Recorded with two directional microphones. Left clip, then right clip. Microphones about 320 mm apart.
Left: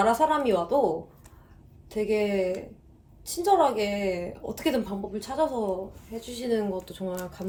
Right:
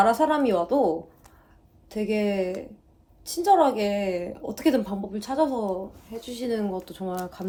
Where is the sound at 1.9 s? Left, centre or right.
Centre.